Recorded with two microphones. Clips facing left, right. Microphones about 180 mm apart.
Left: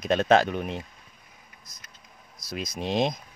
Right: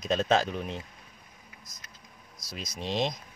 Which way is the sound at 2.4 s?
55° left (ahead or behind).